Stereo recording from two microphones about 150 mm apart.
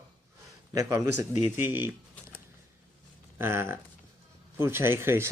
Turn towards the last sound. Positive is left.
turn(degrees=-15)  # may be behind; listen again after turning